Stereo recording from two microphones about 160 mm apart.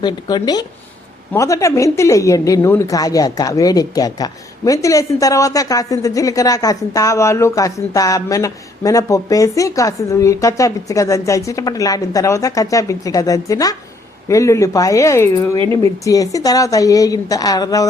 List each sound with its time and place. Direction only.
0.0 s a woman's voice: 25° left (ahead or behind)